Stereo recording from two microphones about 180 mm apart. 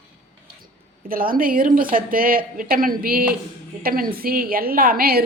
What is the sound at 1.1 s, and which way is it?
Speech, 50° right (ahead or behind).